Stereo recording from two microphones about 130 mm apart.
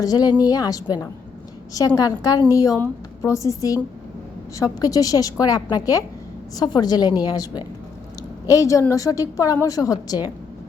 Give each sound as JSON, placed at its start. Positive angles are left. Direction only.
{"t": 0.0, "sound": "a woman's voice", "side_deg": 30}